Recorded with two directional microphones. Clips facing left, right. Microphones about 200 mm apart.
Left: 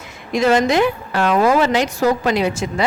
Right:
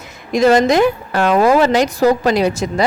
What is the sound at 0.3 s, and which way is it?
A woman's voice, 40° right (ahead or behind).